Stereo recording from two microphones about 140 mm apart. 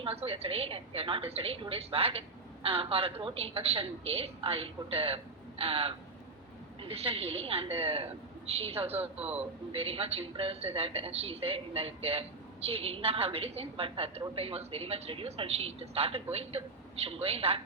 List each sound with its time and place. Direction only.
0.0 s a woman's voice: 45° right (ahead or behind)